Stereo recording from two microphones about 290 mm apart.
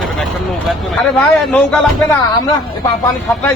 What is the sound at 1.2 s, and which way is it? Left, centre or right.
Speech, centre.